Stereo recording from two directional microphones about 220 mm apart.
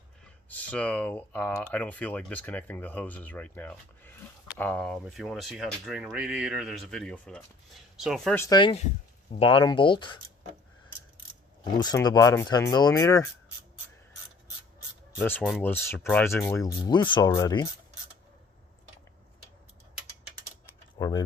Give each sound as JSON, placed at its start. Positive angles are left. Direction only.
{"t": 0.4, "sound": "speech", "side_deg": 5}
{"t": 8.4, "sound": "speech", "side_deg": 20}
{"t": 11.6, "sound": "speech", "side_deg": 20}
{"t": 15.1, "sound": "rub", "side_deg": 10}
{"t": 15.4, "sound": "speech", "side_deg": 0}
{"t": 20.9, "sound": "speech", "side_deg": 20}